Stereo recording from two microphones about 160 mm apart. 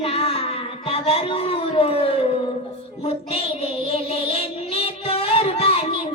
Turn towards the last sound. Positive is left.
turn(degrees=35)  # may be behind; listen again after turning